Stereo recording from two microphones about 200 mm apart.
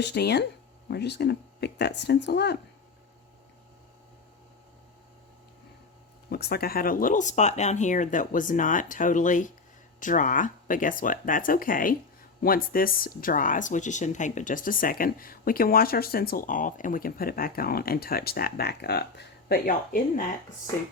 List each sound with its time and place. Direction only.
0.0 s speech: 55° left (ahead or behind)
6.3 s speech: 50° left (ahead or behind)